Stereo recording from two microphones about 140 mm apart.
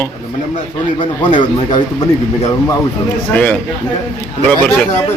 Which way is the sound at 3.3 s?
10° left (ahead or behind).